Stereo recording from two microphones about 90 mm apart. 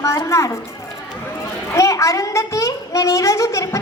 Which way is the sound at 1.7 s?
35° left (ahead or behind).